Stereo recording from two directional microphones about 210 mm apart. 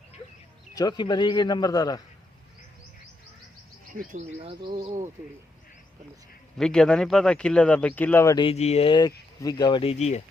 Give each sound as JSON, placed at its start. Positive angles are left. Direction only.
{"t": 0.7, "sound": "speech", "side_deg": 20}
{"t": 3.9, "sound": "speech", "side_deg": -35}
{"t": 6.6, "sound": "speech", "side_deg": 5}
{"t": 8.4, "sound": "speech", "side_deg": 30}